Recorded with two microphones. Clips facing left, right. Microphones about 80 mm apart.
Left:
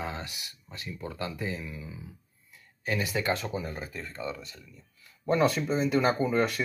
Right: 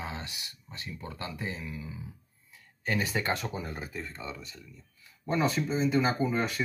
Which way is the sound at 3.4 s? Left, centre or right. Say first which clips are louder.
Left 2 dB; centre.